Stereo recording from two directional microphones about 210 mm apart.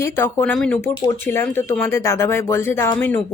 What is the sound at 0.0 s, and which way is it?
Speech, 10° left (ahead or behind).